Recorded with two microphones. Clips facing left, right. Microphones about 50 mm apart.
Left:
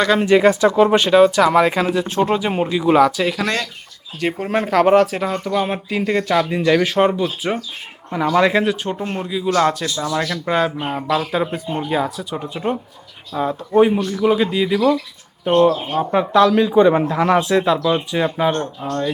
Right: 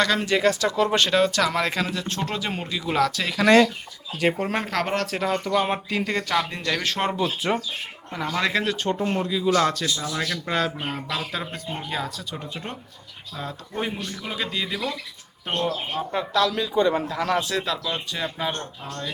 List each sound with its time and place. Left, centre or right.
0.2 s speech: left
0.9 s speech: centre
3.4 s speech: centre
4.2 s speech: centre
8.1 s speech: centre
16.1 s speech: left